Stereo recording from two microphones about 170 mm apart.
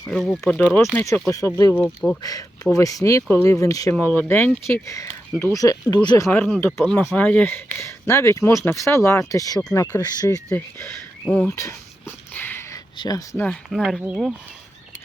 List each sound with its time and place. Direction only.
0.1 s speech: centre (ahead or behind)
2.7 s speech: 20° left (ahead or behind)
3.9 s speech: 5° left (ahead or behind); by 6.2 s 25° left (ahead or behind)
6.3 s speech: 10° left (ahead or behind)
10.2 s speech: 20° left (ahead or behind)
11.4 s a sound: 20° left (ahead or behind)
13.0 s speech: 20° left (ahead or behind)
13.3 s speech: 5° left (ahead or behind)